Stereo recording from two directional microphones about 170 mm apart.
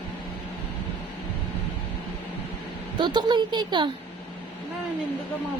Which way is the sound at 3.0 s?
25° right (ahead or behind).